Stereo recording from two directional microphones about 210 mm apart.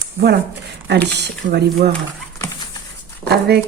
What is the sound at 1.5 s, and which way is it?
Speech, 50° right (ahead or behind).